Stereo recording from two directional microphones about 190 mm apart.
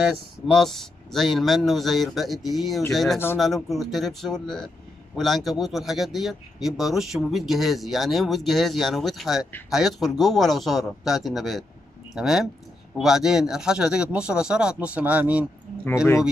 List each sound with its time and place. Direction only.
0.5 s speech: centre (ahead or behind)